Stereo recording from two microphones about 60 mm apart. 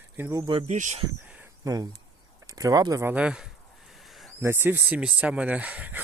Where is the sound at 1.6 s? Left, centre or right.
Right.